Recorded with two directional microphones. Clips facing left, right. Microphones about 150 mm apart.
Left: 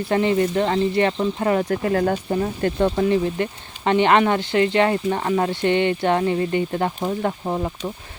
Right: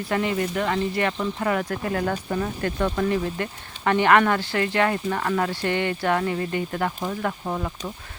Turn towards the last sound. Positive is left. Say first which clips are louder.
# left 4 dB
turn(degrees=25)  # may be behind; listen again after turning